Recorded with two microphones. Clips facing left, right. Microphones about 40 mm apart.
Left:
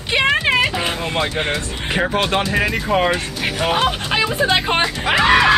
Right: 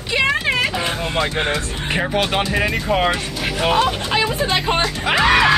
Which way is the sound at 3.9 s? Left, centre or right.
Centre.